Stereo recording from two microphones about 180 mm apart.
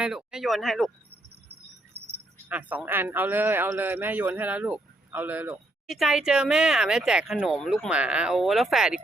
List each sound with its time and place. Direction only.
0.0 s speech: 5° right (ahead or behind)
2.0 s keys jangling: 65° right (ahead or behind)
2.5 s a man's voice: 10° right (ahead or behind)